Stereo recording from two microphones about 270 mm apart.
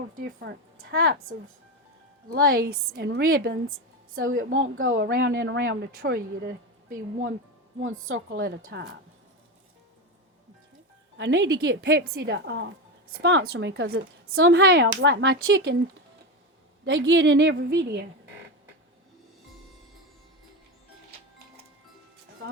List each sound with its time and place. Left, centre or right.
0.2 s a woman's voice: right
3.7 s a sound: right
4.4 s a woman's voice: right
7.8 s a woman's voice: right
11.2 s a woman's voice: right
16.8 s a woman's voice: right